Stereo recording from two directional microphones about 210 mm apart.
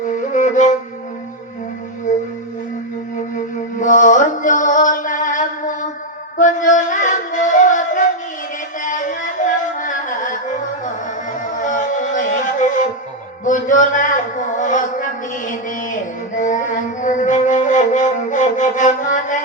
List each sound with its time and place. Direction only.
0.3 s wind instrument: 35° left (ahead or behind)
2.1 s music: 35° left (ahead or behind)
3.8 s music: 40° left (ahead or behind)
11.6 s music: 35° left (ahead or behind)
13.4 s a sound: 35° left (ahead or behind)